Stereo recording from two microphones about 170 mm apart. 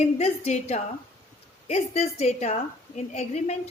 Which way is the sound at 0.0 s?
40° left (ahead or behind).